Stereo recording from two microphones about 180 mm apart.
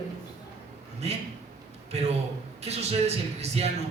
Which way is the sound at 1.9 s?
35° right (ahead or behind).